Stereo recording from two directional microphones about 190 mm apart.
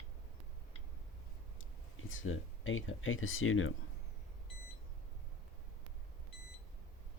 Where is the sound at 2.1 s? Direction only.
90° left.